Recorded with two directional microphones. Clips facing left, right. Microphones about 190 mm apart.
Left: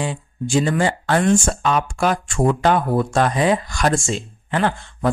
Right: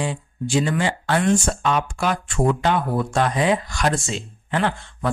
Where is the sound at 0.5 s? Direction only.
45° left (ahead or behind).